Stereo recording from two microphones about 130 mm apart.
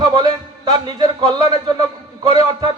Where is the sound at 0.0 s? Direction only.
30° right (ahead or behind).